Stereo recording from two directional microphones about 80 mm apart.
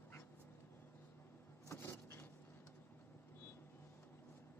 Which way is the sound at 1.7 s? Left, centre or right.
Left.